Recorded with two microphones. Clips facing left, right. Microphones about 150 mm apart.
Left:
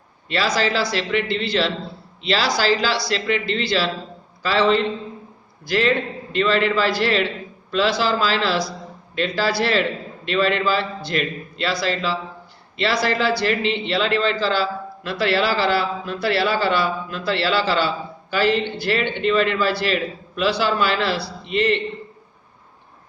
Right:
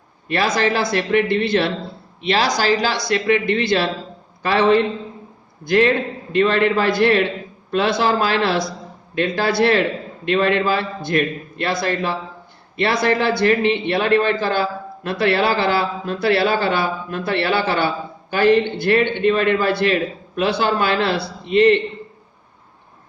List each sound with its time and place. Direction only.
0.3 s a man's voice: 50° right (ahead or behind)